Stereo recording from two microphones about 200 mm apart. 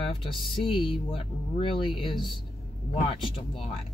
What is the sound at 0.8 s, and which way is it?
Speech, 25° left (ahead or behind).